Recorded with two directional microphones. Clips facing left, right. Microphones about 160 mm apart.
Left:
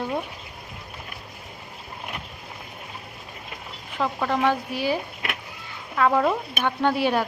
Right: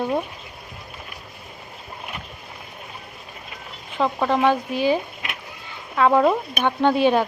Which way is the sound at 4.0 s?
20° right (ahead or behind).